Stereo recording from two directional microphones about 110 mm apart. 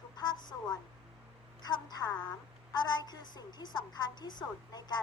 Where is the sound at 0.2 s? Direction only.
40° left (ahead or behind).